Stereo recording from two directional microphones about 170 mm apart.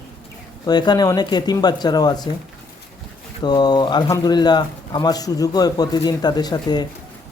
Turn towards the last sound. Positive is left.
turn(degrees=25)  # may be behind; listen again after turning